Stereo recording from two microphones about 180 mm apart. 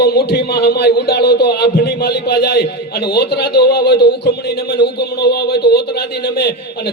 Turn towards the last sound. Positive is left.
turn(degrees=60)  # may be behind; listen again after turning